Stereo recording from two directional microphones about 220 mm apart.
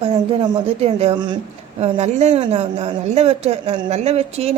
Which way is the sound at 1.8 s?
30° right (ahead or behind).